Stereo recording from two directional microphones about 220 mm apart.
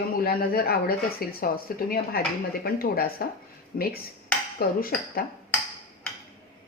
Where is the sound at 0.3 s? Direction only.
45° left (ahead or behind).